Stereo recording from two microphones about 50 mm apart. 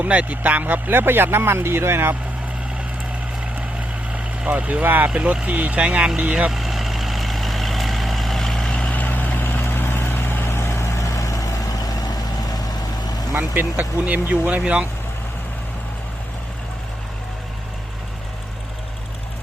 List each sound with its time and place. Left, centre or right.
0.0 s speech: right
4.4 s speech: right
5.1 s speech: centre
6.5 s vehicle: centre
8.7 s vehicle: left
13.5 s speech: right